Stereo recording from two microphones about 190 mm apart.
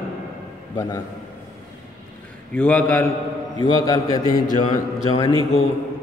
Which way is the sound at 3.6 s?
20° left (ahead or behind).